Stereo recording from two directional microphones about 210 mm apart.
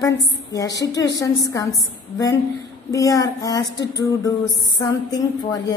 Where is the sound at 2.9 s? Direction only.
15° left (ahead or behind).